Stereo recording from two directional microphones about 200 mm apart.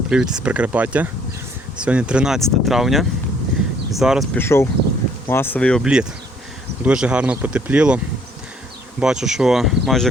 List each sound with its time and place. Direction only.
0.1 s speech: 5° right (ahead or behind)
4.4 s speech: 10° left (ahead or behind)